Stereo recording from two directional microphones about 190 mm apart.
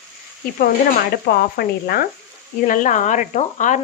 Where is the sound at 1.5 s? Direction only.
55° left (ahead or behind).